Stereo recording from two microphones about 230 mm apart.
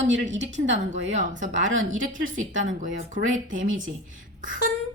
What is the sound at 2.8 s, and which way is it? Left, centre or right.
Speech, right.